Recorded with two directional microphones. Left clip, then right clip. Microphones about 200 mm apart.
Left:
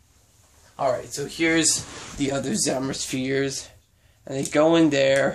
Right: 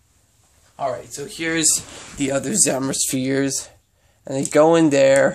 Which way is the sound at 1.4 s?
20° right (ahead or behind).